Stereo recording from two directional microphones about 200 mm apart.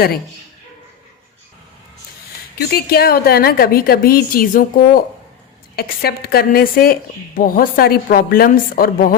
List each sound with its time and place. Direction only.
2.6 s a woman's voice: 50° left (ahead or behind)